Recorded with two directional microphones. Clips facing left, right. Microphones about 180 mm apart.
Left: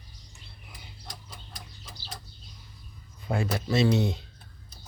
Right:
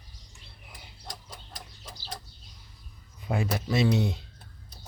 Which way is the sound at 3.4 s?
15° right (ahead or behind).